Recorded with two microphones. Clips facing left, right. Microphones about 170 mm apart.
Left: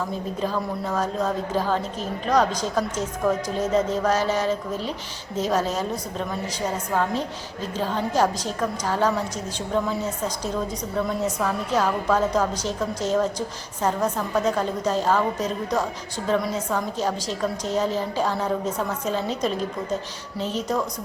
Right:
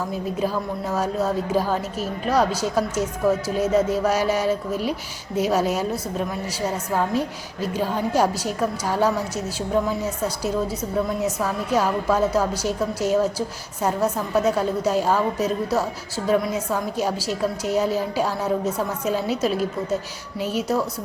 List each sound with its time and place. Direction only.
0.4 s a woman's voice: 10° right (ahead or behind)